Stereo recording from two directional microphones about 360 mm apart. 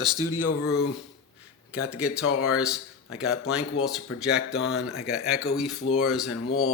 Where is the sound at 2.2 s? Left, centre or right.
Left.